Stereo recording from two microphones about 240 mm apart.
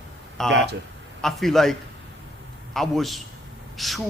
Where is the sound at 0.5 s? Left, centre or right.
Right.